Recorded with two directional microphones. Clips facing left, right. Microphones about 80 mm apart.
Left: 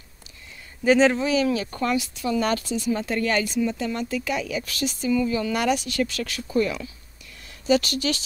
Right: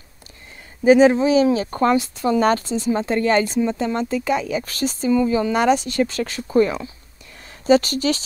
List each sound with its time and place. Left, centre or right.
0.8 s speech: centre; by 8.2 s right